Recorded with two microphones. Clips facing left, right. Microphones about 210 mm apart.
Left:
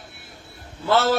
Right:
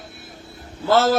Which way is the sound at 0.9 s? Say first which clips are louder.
Right 3 dB; 40° right (ahead or behind).